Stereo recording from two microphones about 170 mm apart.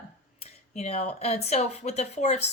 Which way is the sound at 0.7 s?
40° left (ahead or behind).